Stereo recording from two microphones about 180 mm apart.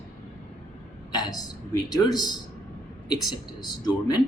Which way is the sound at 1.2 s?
20° left (ahead or behind).